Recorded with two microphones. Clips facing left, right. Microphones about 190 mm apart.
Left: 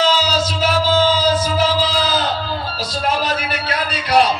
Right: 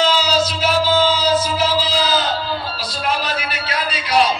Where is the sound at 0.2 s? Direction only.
45° left (ahead or behind).